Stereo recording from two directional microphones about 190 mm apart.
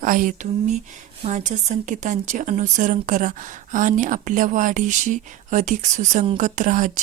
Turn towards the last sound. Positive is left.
turn(degrees=-45)  # may be behind; listen again after turning